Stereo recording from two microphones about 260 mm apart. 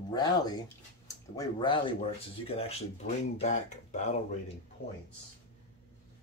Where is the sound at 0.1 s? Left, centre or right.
Centre.